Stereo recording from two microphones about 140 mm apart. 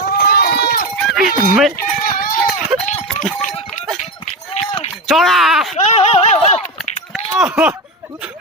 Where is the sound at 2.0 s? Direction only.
85° left.